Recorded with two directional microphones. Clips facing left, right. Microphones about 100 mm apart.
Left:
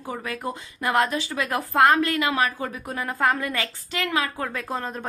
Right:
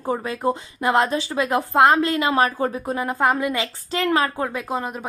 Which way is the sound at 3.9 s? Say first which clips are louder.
Right 6 dB; 35° right (ahead or behind).